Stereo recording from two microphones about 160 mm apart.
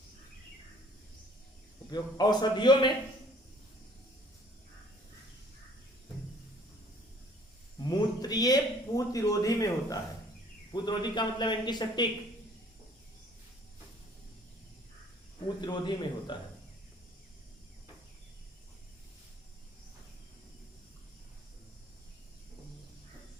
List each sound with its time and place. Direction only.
1.9 s a man's voice: 25° left (ahead or behind)
7.8 s a sound: 25° left (ahead or behind)
10.7 s a man's voice: 25° left (ahead or behind)
15.6 s a man's voice: 30° left (ahead or behind)